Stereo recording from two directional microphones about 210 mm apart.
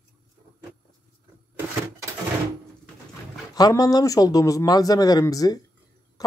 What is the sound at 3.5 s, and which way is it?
Speech, 15° left (ahead or behind).